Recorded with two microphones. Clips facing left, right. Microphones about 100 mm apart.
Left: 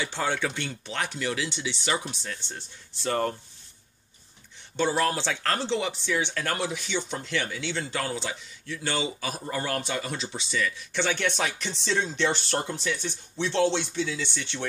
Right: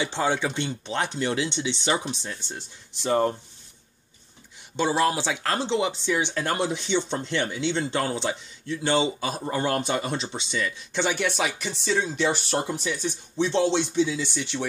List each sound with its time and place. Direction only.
0.0 s speech: 20° right (ahead or behind)
4.7 s speech: 15° right (ahead or behind)